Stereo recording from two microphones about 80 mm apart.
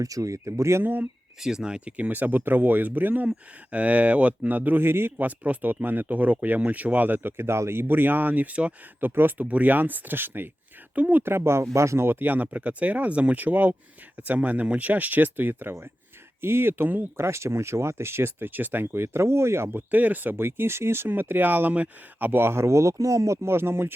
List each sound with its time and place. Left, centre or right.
0.0 s speech: right
1.4 s speech: centre; by 12.1 s right
12.2 s speech: right